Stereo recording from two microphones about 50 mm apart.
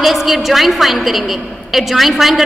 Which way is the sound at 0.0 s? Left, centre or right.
Centre.